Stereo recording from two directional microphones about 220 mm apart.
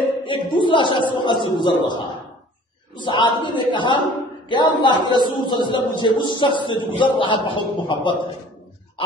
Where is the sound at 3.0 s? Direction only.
20° left (ahead or behind).